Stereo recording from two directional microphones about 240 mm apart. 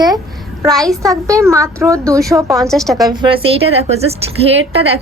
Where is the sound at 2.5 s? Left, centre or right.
Centre.